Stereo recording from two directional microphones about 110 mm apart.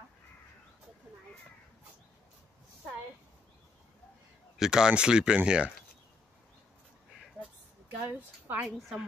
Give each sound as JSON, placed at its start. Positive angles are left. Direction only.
{"t": 4.6, "sound": "speech", "side_deg": -5}
{"t": 8.0, "sound": "speech", "side_deg": -15}
{"t": 8.6, "sound": "a woman's voice", "side_deg": -5}